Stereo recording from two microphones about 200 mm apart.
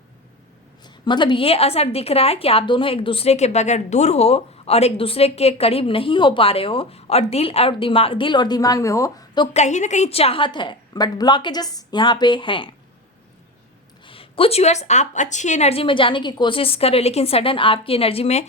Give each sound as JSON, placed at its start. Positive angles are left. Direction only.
{"t": 0.9, "sound": "a woman's voice", "side_deg": 20}
{"t": 9.5, "sound": "a woman's voice", "side_deg": 35}
{"t": 14.0, "sound": "a woman's voice", "side_deg": 25}